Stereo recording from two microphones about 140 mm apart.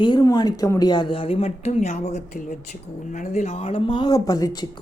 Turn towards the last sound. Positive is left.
turn(degrees=25)  # may be behind; listen again after turning